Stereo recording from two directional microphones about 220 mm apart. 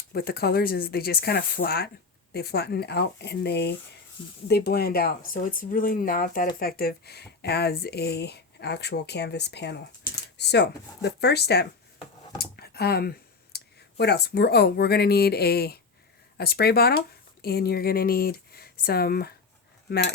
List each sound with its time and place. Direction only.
0.1 s speech: 45° left (ahead or behind)